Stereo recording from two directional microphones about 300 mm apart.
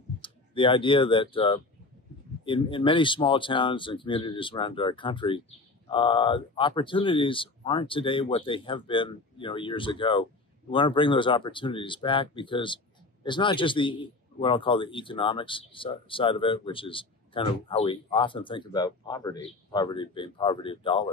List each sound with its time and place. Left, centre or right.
0.2 s speech: centre